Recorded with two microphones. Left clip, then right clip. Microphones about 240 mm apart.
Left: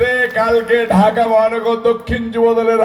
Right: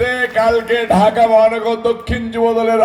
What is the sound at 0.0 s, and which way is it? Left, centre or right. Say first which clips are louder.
Speech: even; right.